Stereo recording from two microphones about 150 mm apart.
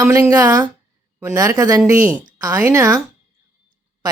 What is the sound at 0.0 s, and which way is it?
Speech, 15° right (ahead or behind).